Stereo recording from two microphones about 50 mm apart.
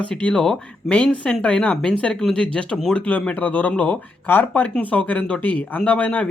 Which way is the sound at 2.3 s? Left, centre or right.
Left.